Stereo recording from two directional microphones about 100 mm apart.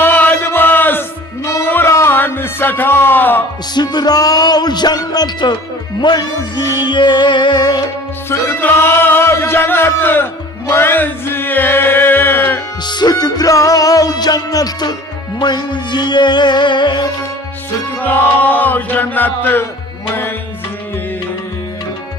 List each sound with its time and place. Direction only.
0.0 s chant: 20° left (ahead or behind)
1.6 s music: 20° left (ahead or behind)
3.8 s music: 45° left (ahead or behind)
8.3 s music: 20° left (ahead or behind)
12.8 s music: 45° left (ahead or behind)
18.0 s chant: 15° left (ahead or behind)